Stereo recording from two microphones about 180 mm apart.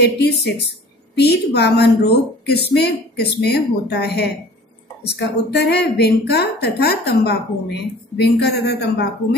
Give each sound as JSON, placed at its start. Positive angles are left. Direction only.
{"t": 0.0, "sound": "a woman's voice", "side_deg": 70}